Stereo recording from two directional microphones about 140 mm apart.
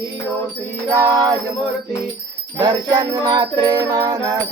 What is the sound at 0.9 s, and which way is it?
Music, 25° right (ahead or behind).